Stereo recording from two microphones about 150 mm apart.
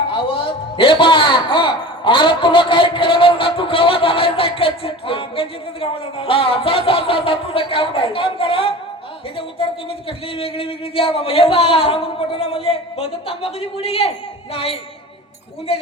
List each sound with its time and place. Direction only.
0.1 s a man's voice: 35° left (ahead or behind)
10.1 s speech: 35° left (ahead or behind)